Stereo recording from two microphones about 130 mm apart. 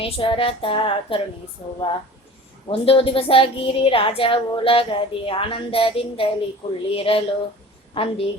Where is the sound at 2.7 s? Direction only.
45° left (ahead or behind).